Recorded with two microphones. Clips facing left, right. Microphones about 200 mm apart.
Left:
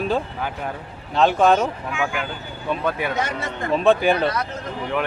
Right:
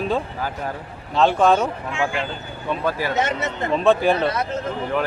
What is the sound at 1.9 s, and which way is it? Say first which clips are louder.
Speech: right 1 dB; 30° right (ahead or behind).